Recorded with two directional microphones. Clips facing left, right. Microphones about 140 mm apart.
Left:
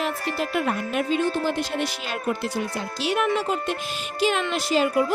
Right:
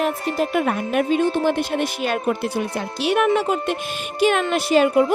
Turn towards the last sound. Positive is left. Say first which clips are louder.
# right 5 dB
turn(degrees=-60)  # may be behind; listen again after turning